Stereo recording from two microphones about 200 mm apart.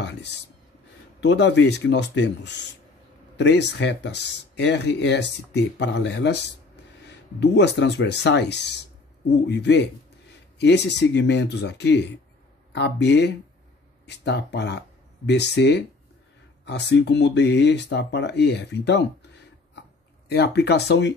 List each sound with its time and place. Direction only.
0.0 s speech: 60° left (ahead or behind)